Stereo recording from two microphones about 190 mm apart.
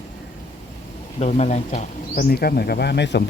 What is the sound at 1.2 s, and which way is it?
Speech, 40° left (ahead or behind).